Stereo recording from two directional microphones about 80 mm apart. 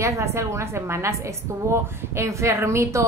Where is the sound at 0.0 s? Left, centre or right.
Right.